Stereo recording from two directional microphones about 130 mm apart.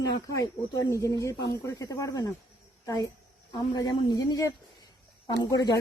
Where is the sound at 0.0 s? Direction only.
25° left (ahead or behind).